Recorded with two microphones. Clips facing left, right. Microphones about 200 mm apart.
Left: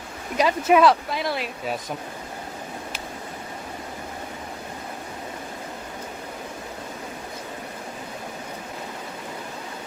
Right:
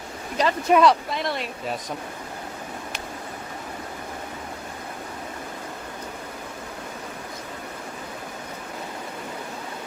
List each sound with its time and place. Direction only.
0.3 s speech: 5° left (ahead or behind)